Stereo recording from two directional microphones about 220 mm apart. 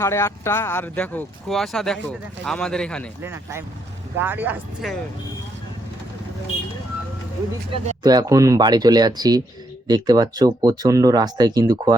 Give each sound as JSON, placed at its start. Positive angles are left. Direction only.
{"t": 0.0, "sound": "speech", "side_deg": 10}
{"t": 3.2, "sound": "speech", "side_deg": -10}
{"t": 7.7, "sound": "speech", "side_deg": -20}